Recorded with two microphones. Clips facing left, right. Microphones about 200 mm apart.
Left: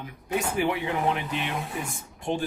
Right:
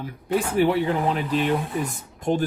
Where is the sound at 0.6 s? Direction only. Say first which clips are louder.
Right 6 dB; 35° right (ahead or behind).